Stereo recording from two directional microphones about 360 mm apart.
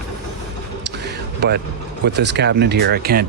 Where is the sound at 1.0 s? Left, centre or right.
Right.